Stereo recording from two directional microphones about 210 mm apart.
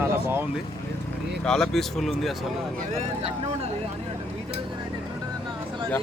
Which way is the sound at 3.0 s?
30° right (ahead or behind).